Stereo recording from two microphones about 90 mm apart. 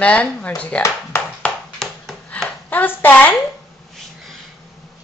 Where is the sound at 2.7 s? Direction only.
20° left (ahead or behind).